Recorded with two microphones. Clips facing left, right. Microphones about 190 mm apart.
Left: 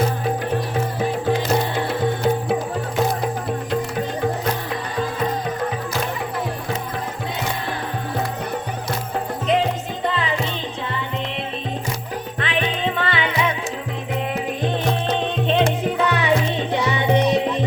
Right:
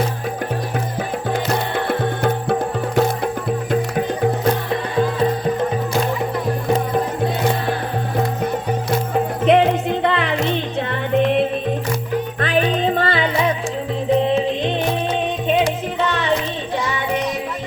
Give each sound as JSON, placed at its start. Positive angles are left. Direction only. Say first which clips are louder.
{"t": 1.9, "sound": "music", "louder": "right 1 dB", "side_deg": -60}
{"t": 9.4, "sound": "music", "louder": "right 6 dB", "side_deg": -65}
{"t": 12.4, "sound": "music", "louder": "right 4 dB", "side_deg": -40}
{"t": 14.2, "sound": "music", "louder": "right 6 dB", "side_deg": -25}
{"t": 16.7, "sound": "music", "louder": "left 2 dB", "side_deg": 20}